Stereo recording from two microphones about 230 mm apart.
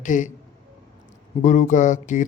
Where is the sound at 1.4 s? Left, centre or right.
Left.